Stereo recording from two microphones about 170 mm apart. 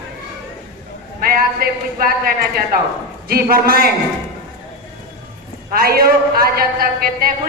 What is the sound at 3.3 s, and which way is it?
Speech, 60° right (ahead or behind).